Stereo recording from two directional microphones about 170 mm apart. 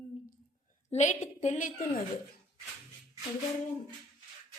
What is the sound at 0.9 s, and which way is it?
Speech, 45° left (ahead or behind).